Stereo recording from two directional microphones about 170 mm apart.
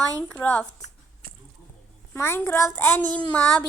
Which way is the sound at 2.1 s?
15° left (ahead or behind).